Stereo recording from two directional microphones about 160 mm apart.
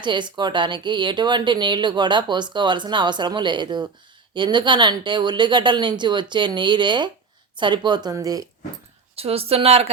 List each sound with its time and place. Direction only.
0.0 s speech: 30° right (ahead or behind)
9.1 s speech: 40° right (ahead or behind)